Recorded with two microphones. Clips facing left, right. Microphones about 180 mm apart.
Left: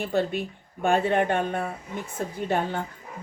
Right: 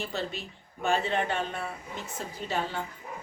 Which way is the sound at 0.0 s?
55° left (ahead or behind).